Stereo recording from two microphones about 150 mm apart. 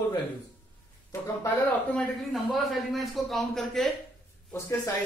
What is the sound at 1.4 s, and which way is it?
A man's voice, 5° left (ahead or behind).